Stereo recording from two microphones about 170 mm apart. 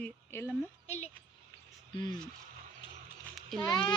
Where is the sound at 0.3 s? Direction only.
15° left (ahead or behind).